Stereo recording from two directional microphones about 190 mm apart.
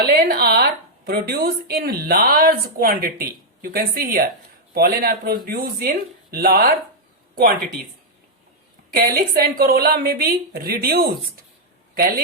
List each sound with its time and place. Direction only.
0.0 s a woman's voice: 55° right (ahead or behind)
9.0 s a woman's voice: 50° right (ahead or behind)